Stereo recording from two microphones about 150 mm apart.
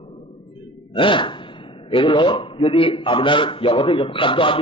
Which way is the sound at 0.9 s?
35° left (ahead or behind).